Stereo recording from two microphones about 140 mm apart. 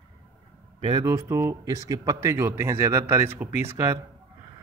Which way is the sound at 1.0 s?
20° right (ahead or behind).